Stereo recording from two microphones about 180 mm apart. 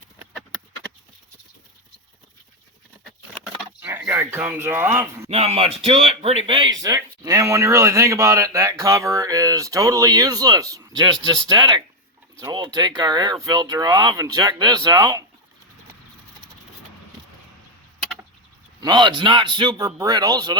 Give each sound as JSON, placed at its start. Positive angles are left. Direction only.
{"t": 3.4, "sound": "a sound", "side_deg": -10}
{"t": 5.3, "sound": "speech", "side_deg": -35}
{"t": 18.8, "sound": "speech", "side_deg": -25}